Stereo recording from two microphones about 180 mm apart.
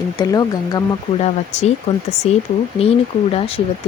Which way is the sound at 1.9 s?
35° left (ahead or behind).